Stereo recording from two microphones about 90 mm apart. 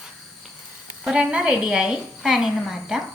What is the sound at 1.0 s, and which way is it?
A woman's voice, 10° right (ahead or behind).